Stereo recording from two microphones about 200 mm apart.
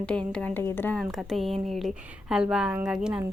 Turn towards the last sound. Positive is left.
turn(degrees=-5)  # may be behind; listen again after turning